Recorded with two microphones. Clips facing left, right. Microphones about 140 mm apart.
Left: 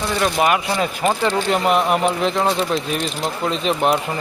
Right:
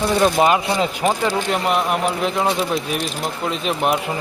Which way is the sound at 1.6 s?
Centre (ahead or behind).